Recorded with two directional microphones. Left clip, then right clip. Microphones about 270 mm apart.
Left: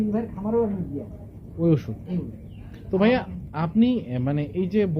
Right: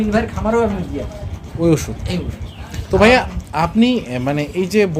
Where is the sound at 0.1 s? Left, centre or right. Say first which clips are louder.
Right 9 dB; right.